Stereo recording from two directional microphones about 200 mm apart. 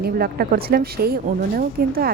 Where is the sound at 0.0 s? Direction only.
50° right (ahead or behind).